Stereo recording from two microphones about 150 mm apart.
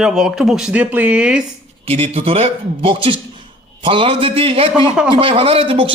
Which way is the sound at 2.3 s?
40° right (ahead or behind).